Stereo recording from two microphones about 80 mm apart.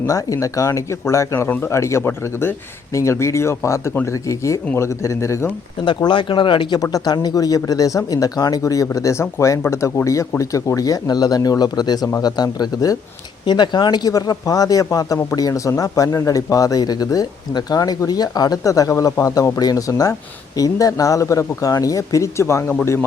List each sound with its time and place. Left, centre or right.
0.0 s speech: left
5.8 s speech: left
6.9 s speech: left
13.4 s speech: left